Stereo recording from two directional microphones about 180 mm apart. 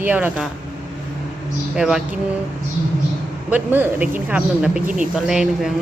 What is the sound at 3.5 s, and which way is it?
Speech, 10° right (ahead or behind).